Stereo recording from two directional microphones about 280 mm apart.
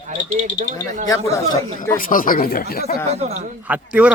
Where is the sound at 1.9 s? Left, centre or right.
Left.